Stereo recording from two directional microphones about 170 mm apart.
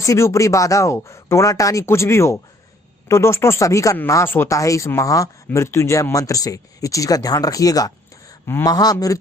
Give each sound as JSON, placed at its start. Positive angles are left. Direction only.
{"t": 0.0, "sound": "speech", "side_deg": 20}